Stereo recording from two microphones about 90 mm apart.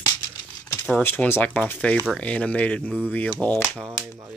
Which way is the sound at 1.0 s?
25° left (ahead or behind).